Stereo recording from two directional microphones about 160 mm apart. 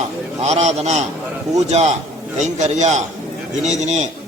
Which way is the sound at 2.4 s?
45° right (ahead or behind).